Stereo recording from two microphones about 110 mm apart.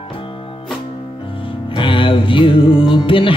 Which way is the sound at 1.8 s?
50° left (ahead or behind).